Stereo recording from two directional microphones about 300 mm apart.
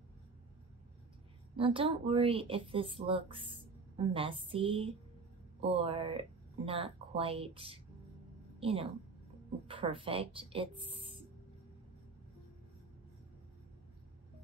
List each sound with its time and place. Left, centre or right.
1.6 s a woman's voice: centre